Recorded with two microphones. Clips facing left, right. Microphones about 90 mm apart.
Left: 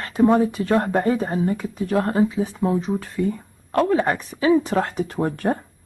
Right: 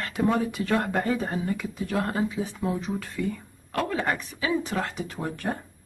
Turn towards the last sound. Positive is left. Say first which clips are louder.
# left 8 dB
turn(degrees=45)  # may be behind; listen again after turning